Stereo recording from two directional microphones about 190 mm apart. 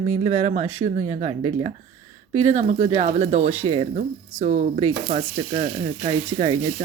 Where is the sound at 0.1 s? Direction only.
35° right (ahead or behind).